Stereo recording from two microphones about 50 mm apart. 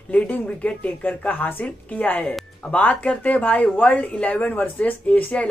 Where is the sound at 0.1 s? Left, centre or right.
Left.